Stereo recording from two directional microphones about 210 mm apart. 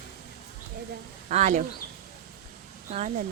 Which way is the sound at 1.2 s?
35° right (ahead or behind).